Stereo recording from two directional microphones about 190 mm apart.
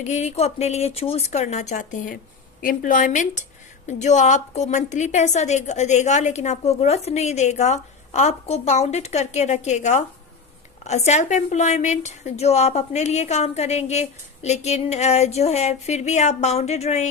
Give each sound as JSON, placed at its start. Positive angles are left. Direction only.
{"t": 0.0, "sound": "a woman's voice", "side_deg": 35}